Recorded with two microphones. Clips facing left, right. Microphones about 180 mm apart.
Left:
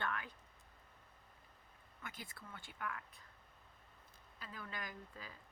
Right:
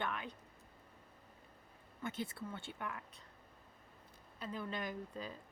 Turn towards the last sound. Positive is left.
turn(degrees=-25)  # may be behind; listen again after turning